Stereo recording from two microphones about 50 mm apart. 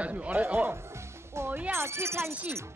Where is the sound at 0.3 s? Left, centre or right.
Right.